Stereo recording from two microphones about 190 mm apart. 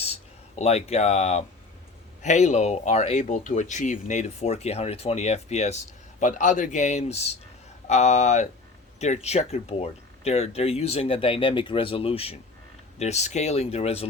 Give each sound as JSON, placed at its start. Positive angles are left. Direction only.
{"t": 0.0, "sound": "speech", "side_deg": 35}